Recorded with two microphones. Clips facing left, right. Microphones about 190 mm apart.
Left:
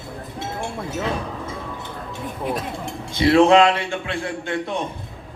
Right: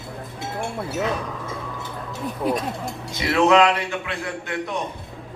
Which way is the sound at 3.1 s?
30° left (ahead or behind).